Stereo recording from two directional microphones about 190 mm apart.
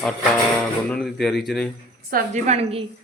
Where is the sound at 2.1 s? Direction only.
35° right (ahead or behind).